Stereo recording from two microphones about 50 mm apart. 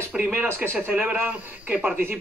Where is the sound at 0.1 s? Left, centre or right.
Centre.